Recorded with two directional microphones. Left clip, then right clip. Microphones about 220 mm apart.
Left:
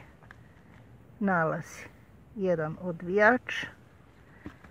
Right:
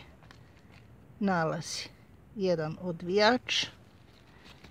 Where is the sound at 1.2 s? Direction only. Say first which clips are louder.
Left 2 dB; 15° right (ahead or behind).